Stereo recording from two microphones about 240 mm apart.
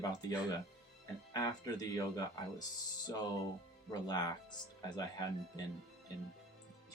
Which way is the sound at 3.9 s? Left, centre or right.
Centre.